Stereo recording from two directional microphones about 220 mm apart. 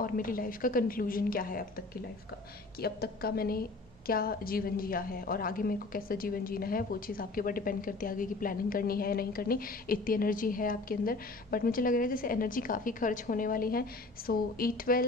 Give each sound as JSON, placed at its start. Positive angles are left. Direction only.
{"t": 0.0, "sound": "a woman's voice", "side_deg": 40}
{"t": 2.8, "sound": "a woman's voice", "side_deg": 45}